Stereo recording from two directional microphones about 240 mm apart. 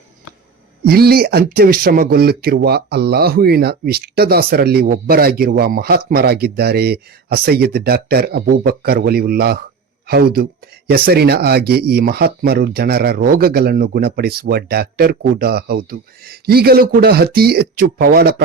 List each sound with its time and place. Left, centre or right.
0.9 s speech: right